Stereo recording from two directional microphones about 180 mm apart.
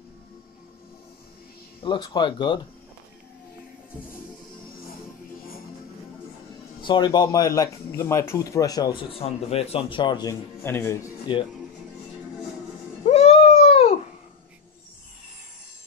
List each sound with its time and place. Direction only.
1.8 s speech: 25° left (ahead or behind)
6.8 s speech: 25° left (ahead or behind)
11.3 s speech: 25° left (ahead or behind)
13.0 s a sound: 35° left (ahead or behind)